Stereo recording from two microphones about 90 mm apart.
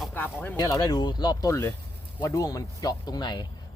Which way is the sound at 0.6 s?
45° left (ahead or behind).